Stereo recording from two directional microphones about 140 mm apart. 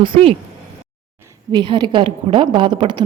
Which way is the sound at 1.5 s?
35° right (ahead or behind).